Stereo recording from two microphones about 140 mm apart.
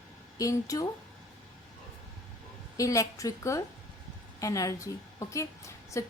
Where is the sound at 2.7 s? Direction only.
25° left (ahead or behind).